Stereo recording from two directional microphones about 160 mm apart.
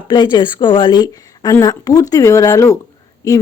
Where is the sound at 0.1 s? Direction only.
30° left (ahead or behind).